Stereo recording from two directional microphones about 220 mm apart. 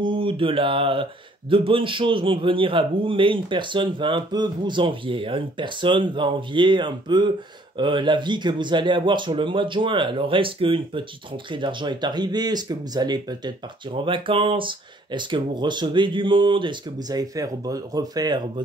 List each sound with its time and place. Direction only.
0.0 s a man's voice: 25° right (ahead or behind)